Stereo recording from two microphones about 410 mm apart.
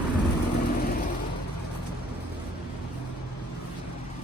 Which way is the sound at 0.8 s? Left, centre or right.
Left.